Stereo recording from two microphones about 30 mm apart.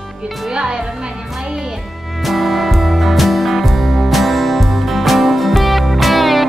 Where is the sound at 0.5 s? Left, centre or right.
Right.